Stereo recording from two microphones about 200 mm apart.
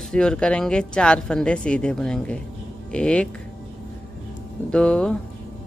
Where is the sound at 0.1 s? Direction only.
5° left (ahead or behind).